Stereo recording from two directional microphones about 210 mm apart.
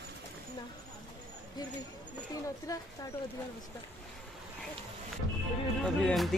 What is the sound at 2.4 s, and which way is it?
Speech, 15° left (ahead or behind).